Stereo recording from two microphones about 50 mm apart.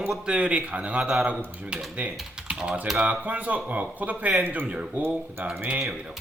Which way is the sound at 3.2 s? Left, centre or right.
Right.